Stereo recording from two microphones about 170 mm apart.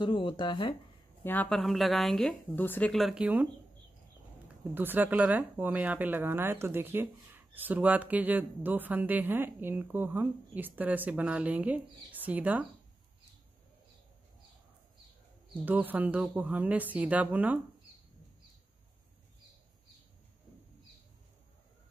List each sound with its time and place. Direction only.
0.0 s speech: 30° left (ahead or behind)
1.2 s speech: 10° left (ahead or behind); by 3.4 s 5° right (ahead or behind)
4.7 s speech: 10° right (ahead or behind)
15.6 s speech: 10° right (ahead or behind)